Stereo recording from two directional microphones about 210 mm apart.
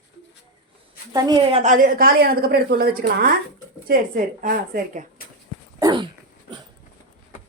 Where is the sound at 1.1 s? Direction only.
25° right (ahead or behind).